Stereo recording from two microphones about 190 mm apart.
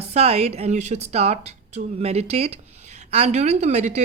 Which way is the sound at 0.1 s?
35° right (ahead or behind).